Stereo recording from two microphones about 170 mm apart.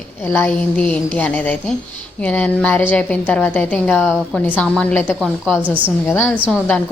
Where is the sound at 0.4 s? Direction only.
5° left (ahead or behind).